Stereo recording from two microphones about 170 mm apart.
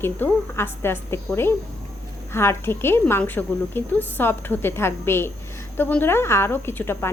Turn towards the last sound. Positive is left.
turn(degrees=15)  # may be behind; listen again after turning